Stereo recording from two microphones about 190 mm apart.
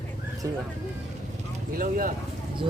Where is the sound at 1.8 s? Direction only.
50° right (ahead or behind).